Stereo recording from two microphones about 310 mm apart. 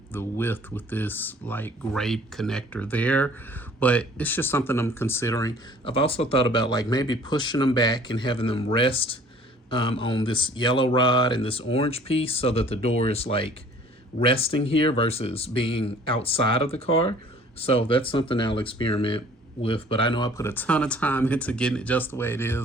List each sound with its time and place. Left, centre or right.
0.1 s speech: centre